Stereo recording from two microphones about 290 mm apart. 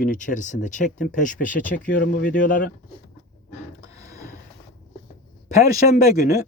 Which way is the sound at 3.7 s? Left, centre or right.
Centre.